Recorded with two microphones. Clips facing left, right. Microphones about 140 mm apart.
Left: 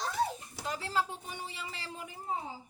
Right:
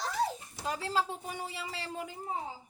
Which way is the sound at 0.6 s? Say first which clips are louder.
Right 2 dB; 30° right (ahead or behind).